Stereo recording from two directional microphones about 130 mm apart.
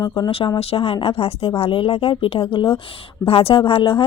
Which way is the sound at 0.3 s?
40° left (ahead or behind).